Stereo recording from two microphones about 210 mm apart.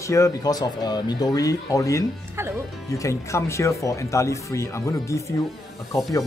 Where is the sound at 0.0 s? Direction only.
15° left (ahead or behind).